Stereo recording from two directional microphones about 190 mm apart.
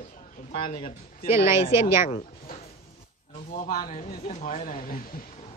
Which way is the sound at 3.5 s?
45° left (ahead or behind).